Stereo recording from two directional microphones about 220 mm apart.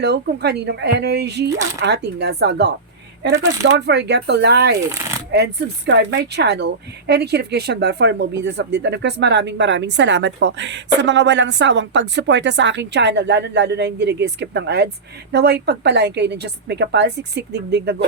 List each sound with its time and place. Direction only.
0.0 s speech: 50° right (ahead or behind)